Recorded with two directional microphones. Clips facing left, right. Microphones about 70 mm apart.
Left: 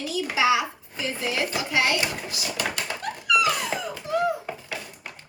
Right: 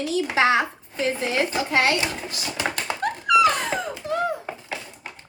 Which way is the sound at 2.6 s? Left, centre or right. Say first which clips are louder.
Right 5 dB; right.